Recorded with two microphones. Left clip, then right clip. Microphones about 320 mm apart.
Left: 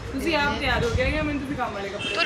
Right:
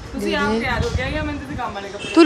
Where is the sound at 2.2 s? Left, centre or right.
Right.